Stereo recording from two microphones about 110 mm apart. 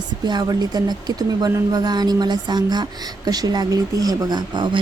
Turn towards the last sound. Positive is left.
turn(degrees=-45)  # may be behind; listen again after turning